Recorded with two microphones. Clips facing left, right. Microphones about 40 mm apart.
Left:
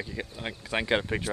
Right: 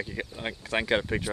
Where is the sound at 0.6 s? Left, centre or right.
Centre.